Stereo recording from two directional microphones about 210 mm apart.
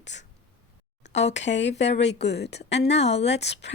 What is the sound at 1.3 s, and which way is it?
A woman's voice, 60° left (ahead or behind).